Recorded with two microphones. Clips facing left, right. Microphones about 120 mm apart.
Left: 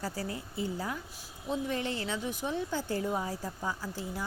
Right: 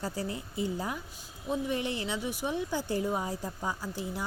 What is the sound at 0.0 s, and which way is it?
A woman's voice, 20° right (ahead or behind).